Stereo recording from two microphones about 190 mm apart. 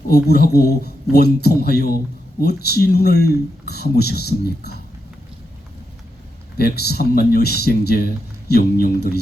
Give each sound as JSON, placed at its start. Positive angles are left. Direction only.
{"t": 0.1, "sound": "speech", "side_deg": 55}
{"t": 6.6, "sound": "speech", "side_deg": 55}